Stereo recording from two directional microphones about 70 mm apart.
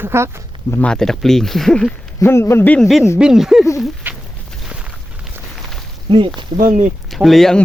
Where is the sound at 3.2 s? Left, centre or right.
Centre.